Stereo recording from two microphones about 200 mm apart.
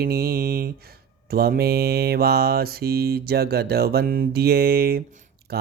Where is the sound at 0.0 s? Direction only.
50° right (ahead or behind).